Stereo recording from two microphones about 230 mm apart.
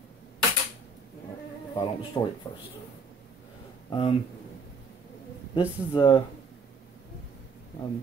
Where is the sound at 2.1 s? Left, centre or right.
Centre.